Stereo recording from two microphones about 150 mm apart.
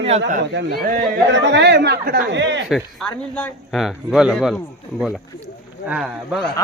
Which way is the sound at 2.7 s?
Centre (ahead or behind).